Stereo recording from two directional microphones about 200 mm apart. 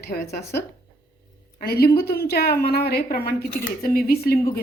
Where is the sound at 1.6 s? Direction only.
50° left (ahead or behind).